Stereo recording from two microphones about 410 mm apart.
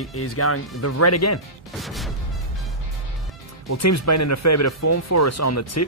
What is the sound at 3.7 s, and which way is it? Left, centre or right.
Speech, left.